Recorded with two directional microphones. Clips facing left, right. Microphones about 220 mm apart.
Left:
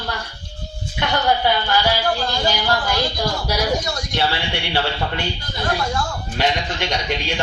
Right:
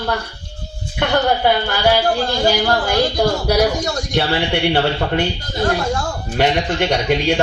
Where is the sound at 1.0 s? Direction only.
50° right (ahead or behind).